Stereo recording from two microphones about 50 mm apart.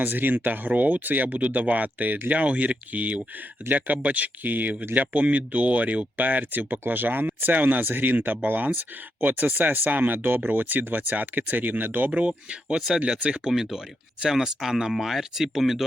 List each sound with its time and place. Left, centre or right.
0.0 s speech: right
12.5 s speech: centre
13.5 s speech: centre